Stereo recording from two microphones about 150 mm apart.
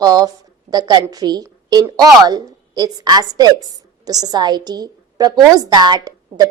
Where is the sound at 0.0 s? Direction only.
25° right (ahead or behind).